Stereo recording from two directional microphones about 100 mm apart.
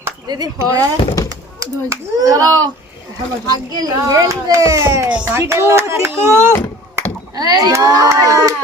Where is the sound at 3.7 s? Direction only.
40° right (ahead or behind).